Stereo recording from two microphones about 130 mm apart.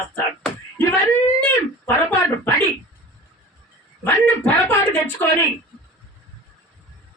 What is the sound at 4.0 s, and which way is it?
Speech, 15° left (ahead or behind).